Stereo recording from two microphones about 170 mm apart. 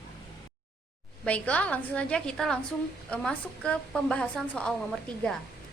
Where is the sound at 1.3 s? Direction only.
10° left (ahead or behind).